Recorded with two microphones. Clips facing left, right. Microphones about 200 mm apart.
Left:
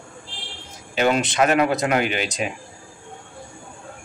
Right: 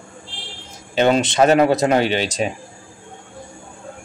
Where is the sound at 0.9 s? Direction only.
30° right (ahead or behind).